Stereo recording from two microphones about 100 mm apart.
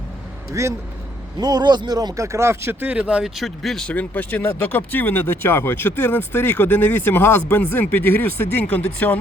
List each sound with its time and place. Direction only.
0.6 s speech: 30° right (ahead or behind)
1.4 s speech: 45° right (ahead or behind); by 2.7 s 25° right (ahead or behind)
2.8 s speech: 10° right (ahead or behind); by 9.1 s 15° left (ahead or behind)